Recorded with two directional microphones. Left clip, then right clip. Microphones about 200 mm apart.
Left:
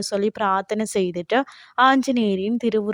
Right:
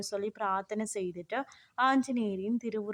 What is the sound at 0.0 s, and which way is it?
A woman's voice, 40° left (ahead or behind).